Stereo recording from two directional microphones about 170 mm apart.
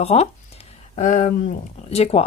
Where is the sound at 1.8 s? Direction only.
35° left (ahead or behind).